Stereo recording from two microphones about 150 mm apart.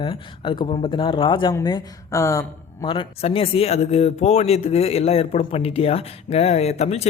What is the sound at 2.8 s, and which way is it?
Speech, 35° left (ahead or behind).